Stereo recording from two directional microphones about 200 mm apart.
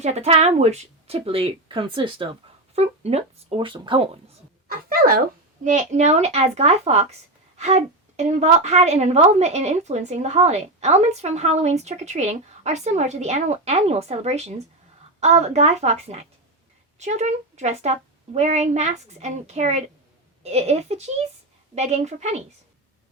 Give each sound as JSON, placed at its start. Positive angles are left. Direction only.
{"t": 0.0, "sound": "speech", "side_deg": -35}
{"t": 4.7, "sound": "speech", "side_deg": -50}
{"t": 5.6, "sound": "speech", "side_deg": -35}